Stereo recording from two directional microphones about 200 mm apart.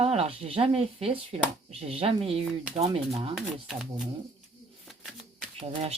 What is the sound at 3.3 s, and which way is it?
Speech, centre (ahead or behind).